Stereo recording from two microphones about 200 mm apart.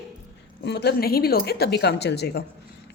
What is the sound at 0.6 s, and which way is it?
A woman's voice, 55° left (ahead or behind).